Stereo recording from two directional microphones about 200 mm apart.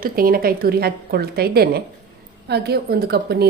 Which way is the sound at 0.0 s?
45° right (ahead or behind).